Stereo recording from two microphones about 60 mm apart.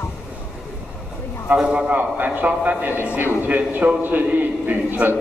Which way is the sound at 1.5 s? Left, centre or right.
Centre.